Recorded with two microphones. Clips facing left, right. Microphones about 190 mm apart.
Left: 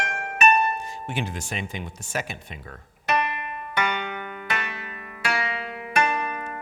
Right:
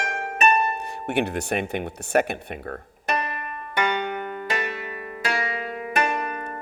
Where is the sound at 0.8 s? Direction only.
65° right (ahead or behind).